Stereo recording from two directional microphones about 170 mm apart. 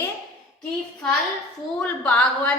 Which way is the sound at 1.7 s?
10° left (ahead or behind).